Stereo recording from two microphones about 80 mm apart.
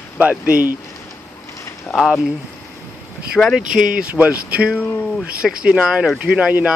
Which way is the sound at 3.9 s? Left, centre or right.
Centre.